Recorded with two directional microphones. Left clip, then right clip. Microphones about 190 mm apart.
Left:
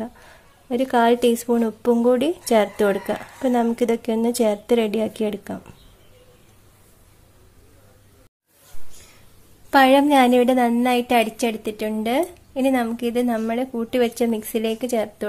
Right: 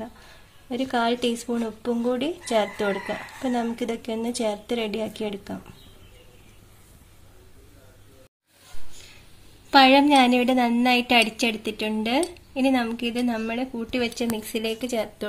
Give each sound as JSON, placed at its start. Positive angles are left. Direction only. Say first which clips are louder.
{"t": 0.0, "sound": "a woman's voice", "louder": "left 5 dB", "side_deg": 20}
{"t": 9.7, "sound": "a woman's voice", "louder": "left 1 dB", "side_deg": 10}